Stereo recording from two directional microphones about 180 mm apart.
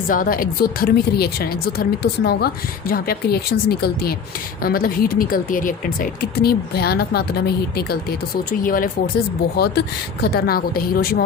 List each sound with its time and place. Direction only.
0.1 s speech: 50° left (ahead or behind)
8.6 s speech: 50° left (ahead or behind)
9.6 s speech: 65° left (ahead or behind)